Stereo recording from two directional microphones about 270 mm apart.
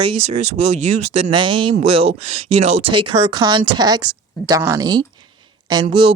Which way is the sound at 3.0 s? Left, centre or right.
Centre.